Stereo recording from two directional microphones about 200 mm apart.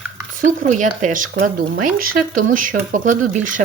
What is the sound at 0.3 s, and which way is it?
Speech, 40° right (ahead or behind).